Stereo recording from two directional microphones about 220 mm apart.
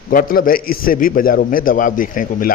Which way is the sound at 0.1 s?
40° left (ahead or behind).